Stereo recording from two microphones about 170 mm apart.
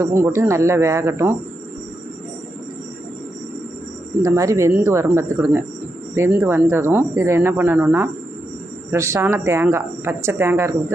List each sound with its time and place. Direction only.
0.0 s speech: 15° right (ahead or behind)
4.2 s speech: 20° right (ahead or behind)